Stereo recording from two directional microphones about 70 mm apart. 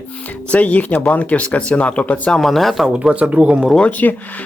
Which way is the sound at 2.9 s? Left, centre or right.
Centre.